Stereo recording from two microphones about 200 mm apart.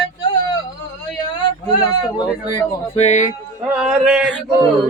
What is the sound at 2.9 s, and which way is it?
Speech, 35° left (ahead or behind).